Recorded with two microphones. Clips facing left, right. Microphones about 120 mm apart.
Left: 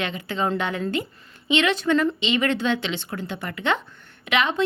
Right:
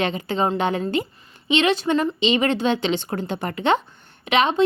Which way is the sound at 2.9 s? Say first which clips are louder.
Right 6 dB; 40° right (ahead or behind).